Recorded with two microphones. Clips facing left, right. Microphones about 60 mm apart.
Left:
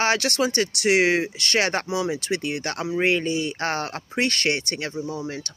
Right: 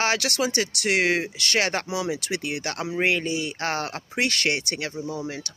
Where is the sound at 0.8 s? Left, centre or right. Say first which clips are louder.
Left 4 dB; centre.